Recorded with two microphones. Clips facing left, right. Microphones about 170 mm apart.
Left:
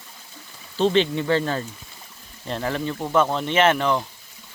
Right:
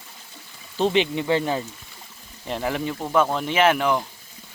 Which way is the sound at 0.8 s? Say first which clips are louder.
Left 1 dB; 15° right (ahead or behind).